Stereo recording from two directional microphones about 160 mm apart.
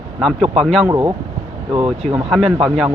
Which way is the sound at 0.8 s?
20° right (ahead or behind).